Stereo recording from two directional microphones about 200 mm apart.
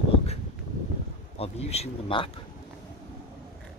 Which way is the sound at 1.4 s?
30° left (ahead or behind).